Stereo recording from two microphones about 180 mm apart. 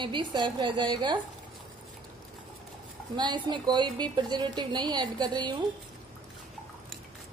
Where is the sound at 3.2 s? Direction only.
25° right (ahead or behind).